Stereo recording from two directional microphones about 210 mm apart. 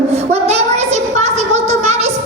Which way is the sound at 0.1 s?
30° right (ahead or behind).